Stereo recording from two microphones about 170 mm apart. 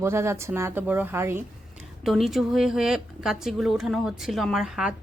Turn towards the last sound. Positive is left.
turn(degrees=-5)  # may be behind; listen again after turning